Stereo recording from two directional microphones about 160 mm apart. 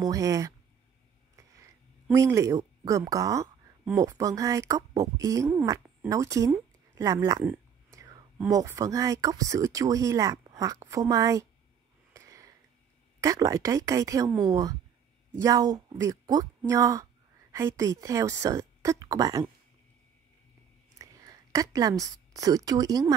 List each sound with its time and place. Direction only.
0.0 s speech: 20° right (ahead or behind)
2.0 s speech: 20° right (ahead or behind)
12.1 s a sound: 20° right (ahead or behind)
13.2 s speech: 20° right (ahead or behind)
21.0 s a woman's voice: 20° right (ahead or behind)